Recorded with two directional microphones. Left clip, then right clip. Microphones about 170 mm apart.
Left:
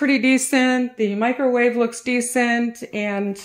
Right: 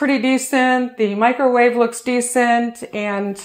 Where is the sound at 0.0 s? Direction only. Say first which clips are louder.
Right 1 dB; 35° left (ahead or behind).